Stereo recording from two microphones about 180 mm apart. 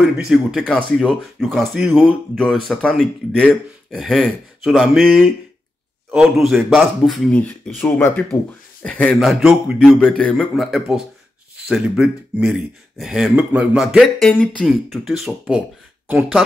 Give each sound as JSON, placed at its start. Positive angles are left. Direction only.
{"t": 0.3, "sound": "speech", "side_deg": 0}